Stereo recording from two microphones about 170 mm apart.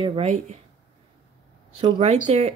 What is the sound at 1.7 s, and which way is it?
Speech, 30° right (ahead or behind).